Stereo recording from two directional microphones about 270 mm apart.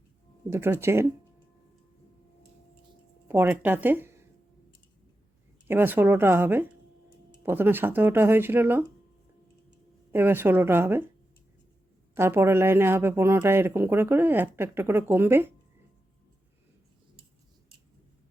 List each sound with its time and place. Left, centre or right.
0.5 s speech: centre
3.2 s speech: centre
5.6 s speech: centre
10.1 s speech: centre
12.1 s speech: centre